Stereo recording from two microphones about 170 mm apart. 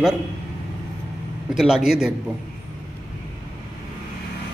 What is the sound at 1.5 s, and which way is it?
Speech, 5° right (ahead or behind).